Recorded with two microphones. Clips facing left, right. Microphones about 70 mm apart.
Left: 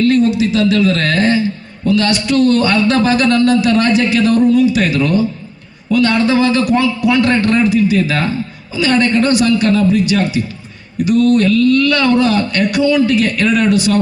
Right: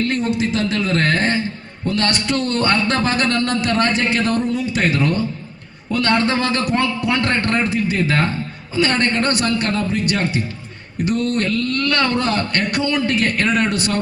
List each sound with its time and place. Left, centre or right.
0.3 s speech: right